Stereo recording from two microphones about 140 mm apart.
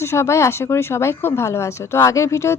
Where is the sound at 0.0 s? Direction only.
20° left (ahead or behind).